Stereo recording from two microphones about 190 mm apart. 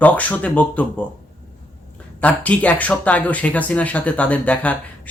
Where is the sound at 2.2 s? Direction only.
5° left (ahead or behind).